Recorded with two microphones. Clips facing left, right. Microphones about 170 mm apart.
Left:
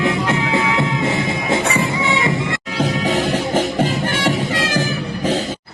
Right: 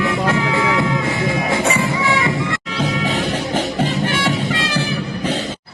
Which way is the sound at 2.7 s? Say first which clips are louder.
Left 2 dB; 40° left (ahead or behind).